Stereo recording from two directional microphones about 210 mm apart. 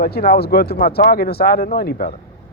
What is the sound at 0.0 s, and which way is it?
Speech, 50° left (ahead or behind).